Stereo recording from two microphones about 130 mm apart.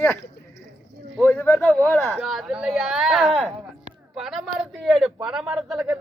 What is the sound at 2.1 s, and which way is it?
Speech, 5° right (ahead or behind).